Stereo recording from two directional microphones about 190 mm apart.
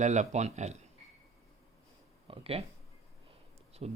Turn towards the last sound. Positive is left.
turn(degrees=-35)  # may be behind; listen again after turning